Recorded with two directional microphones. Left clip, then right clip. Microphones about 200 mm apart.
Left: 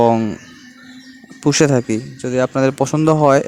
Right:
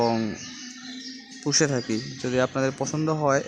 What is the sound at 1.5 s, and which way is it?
Speech, 40° left (ahead or behind).